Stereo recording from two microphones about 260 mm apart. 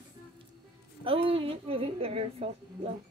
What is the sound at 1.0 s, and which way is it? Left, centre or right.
A woman's voice, right.